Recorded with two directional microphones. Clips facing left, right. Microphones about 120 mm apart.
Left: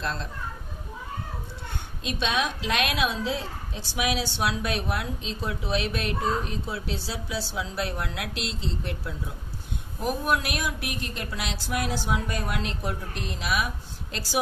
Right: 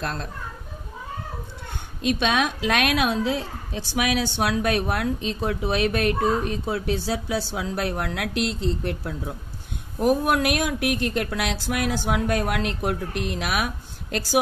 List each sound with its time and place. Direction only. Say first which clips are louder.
0.0 s a woman's voice: right 2 dB; 55° right (ahead or behind)
2.0 s a woman's voice: right 5 dB; 60° right (ahead or behind)
10.2 s a woman's voice: right 5 dB; 60° right (ahead or behind)